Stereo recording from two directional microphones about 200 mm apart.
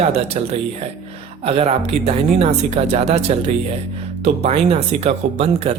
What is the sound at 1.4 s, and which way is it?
Speech, 30° right (ahead or behind).